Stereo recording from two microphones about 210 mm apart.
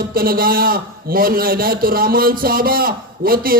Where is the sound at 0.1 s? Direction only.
45° right (ahead or behind).